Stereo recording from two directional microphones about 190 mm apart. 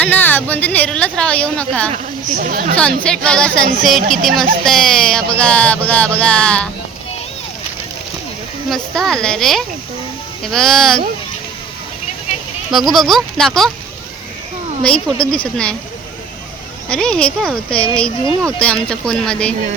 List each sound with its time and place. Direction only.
0.0 s a woman's voice: 10° left (ahead or behind)
2.3 s speech: 50° right (ahead or behind)
2.7 s a woman's voice: 5° left (ahead or behind)
8.7 s speech: 5° left (ahead or behind)
12.7 s speech: centre (ahead or behind)
14.8 s a woman's voice: 5° left (ahead or behind)
16.9 s speech: 5° left (ahead or behind)